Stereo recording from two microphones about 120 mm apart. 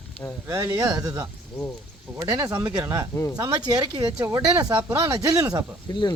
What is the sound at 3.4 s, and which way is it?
Speech, 35° right (ahead or behind).